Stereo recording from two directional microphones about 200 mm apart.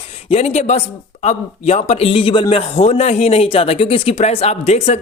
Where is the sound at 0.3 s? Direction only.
30° left (ahead or behind).